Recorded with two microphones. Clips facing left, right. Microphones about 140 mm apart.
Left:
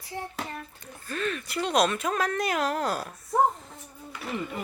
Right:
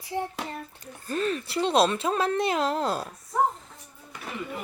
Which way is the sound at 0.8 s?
35° right (ahead or behind).